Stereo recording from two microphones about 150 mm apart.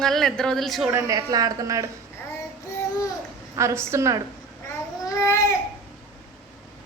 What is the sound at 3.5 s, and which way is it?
Speech, 20° right (ahead or behind).